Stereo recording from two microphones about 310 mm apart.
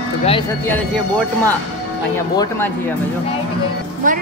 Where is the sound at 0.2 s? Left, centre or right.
Centre.